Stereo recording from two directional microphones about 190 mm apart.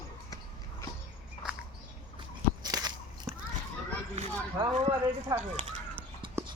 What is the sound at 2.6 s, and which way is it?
Biting, 20° right (ahead or behind).